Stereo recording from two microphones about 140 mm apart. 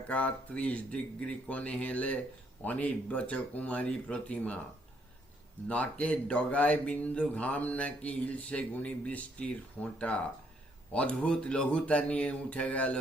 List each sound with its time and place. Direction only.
0.1 s speech: 10° left (ahead or behind)
5.6 s speech: 10° left (ahead or behind)